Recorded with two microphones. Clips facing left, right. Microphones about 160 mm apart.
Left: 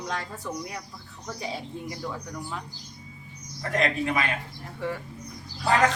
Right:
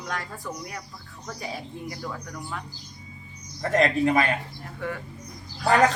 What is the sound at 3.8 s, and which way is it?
Speech, 40° right (ahead or behind).